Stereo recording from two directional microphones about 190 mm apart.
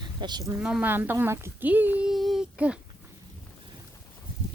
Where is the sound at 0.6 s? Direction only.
5° right (ahead or behind).